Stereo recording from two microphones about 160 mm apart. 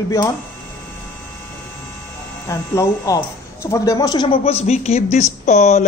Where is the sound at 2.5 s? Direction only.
20° left (ahead or behind).